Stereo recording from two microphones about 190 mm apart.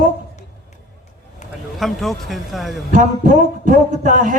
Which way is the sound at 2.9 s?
40° right (ahead or behind).